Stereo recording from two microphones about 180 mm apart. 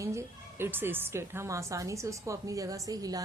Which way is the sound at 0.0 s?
15° right (ahead or behind).